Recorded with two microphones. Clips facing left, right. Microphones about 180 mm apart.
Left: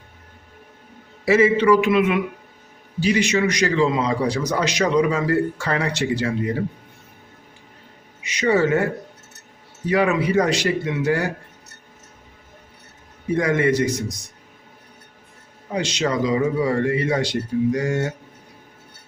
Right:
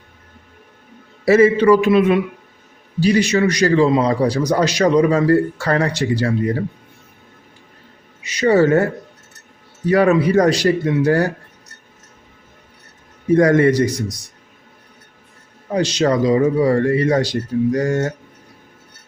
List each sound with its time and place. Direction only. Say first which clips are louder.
1.2 s a man's voice: right 4 dB; 40° right (ahead or behind)
8.2 s a man's voice: right 5 dB; 35° right (ahead or behind)
9.9 s a man's voice: right 5 dB; 40° right (ahead or behind)
13.3 s a man's voice: right 6 dB; 40° right (ahead or behind)
15.7 s a man's voice: right 6 dB; 35° right (ahead or behind)